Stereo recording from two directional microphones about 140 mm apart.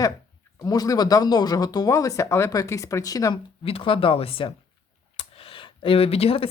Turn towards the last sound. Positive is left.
turn(degrees=45)  # may be behind; listen again after turning